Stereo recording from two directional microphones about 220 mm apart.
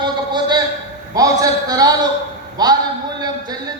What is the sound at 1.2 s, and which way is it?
A man's voice, 15° right (ahead or behind).